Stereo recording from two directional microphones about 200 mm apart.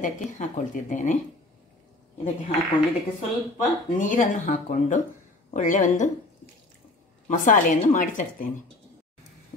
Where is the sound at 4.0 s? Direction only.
40° left (ahead or behind).